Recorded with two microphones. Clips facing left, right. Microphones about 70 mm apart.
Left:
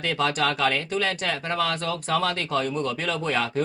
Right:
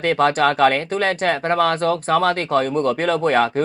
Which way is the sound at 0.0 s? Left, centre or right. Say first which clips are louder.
Right 8 dB; right.